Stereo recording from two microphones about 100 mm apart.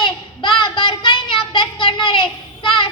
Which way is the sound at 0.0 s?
55° left (ahead or behind).